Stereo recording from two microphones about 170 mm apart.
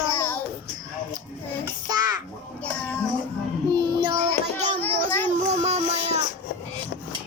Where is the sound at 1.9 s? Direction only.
25° right (ahead or behind).